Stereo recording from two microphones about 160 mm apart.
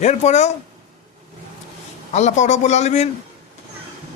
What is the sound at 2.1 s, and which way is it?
Speech, 45° left (ahead or behind).